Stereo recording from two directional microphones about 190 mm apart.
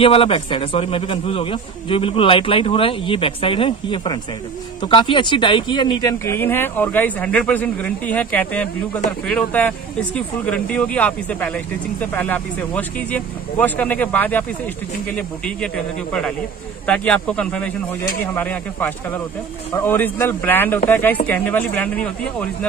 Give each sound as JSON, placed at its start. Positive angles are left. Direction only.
{"t": 0.0, "sound": "a man's voice", "side_deg": 30}